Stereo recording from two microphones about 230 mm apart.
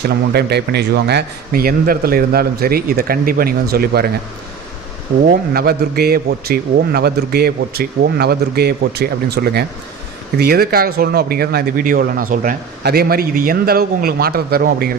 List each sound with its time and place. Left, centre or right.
0.0 s speech: right
5.2 s a man's voice: right